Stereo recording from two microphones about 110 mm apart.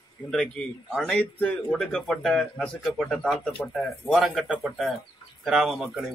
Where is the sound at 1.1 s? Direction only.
20° left (ahead or behind).